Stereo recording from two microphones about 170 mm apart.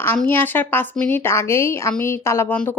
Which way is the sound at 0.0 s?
10° left (ahead or behind).